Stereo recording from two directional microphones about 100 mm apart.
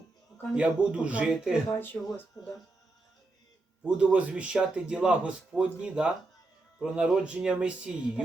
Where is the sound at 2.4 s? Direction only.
40° left (ahead or behind).